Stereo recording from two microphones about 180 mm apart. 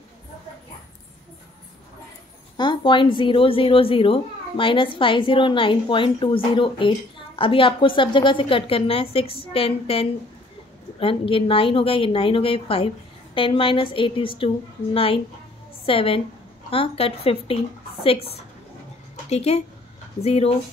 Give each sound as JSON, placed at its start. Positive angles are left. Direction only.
{"t": 2.5, "sound": "a woman's voice", "side_deg": 25}
{"t": 15.8, "sound": "a woman's voice", "side_deg": 30}